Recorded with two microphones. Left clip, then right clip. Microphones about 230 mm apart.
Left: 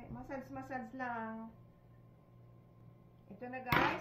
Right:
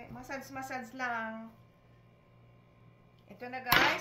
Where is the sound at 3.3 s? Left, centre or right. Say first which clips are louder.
Right 5 dB; right.